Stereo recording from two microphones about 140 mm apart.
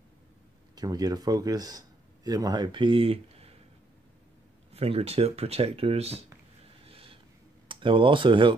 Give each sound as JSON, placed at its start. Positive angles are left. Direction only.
{"t": 0.7, "sound": "a man's voice", "side_deg": -25}
{"t": 4.7, "sound": "speech", "side_deg": -45}
{"t": 6.9, "sound": "a sound", "side_deg": -40}
{"t": 7.6, "sound": "speech", "side_deg": -35}